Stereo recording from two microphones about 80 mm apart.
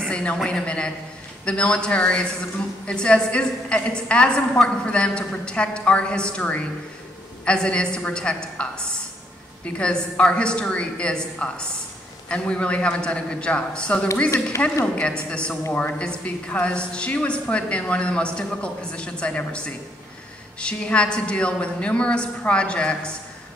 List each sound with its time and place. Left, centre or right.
0.0 s a woman's voice: centre
9.8 s a woman's voice: centre